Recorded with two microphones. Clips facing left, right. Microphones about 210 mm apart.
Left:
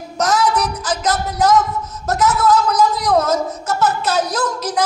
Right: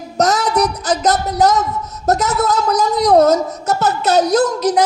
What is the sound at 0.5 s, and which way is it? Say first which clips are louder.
A child's voice: right 4 dB; 40° right (ahead or behind).